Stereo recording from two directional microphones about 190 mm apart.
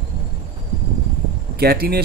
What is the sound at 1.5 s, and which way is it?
Speech, 55° right (ahead or behind).